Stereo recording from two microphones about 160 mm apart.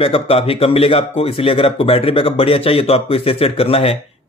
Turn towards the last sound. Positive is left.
turn(degrees=35)  # may be behind; listen again after turning